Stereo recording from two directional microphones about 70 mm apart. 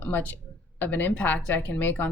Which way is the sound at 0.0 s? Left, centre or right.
Left.